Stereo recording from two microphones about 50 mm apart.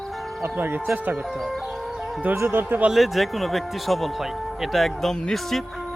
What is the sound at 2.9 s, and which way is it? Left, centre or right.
Speech, centre.